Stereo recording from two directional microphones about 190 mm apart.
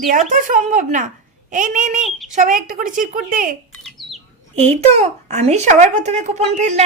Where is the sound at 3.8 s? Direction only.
Centre (ahead or behind).